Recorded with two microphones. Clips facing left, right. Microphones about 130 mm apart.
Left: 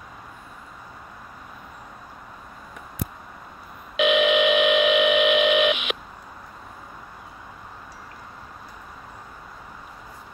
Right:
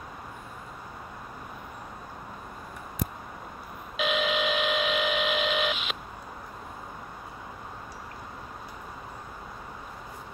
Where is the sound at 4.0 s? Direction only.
70° left (ahead or behind).